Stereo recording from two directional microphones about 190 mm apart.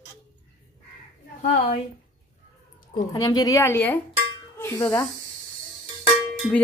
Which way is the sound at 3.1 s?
20° left (ahead or behind).